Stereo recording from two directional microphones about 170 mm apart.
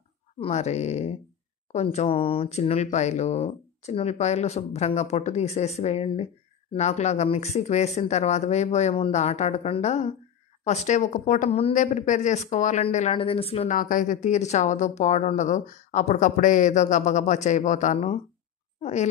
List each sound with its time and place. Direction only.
0.4 s a woman's voice: 40° left (ahead or behind)
13.7 s a woman's voice: 50° left (ahead or behind)